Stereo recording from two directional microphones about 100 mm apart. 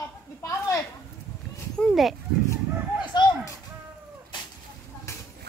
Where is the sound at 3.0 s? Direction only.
50° left (ahead or behind).